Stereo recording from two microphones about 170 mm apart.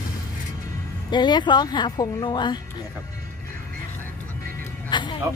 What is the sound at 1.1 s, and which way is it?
A woman's voice, 25° left (ahead or behind).